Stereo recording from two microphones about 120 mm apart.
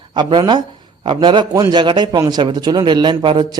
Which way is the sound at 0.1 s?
40° right (ahead or behind).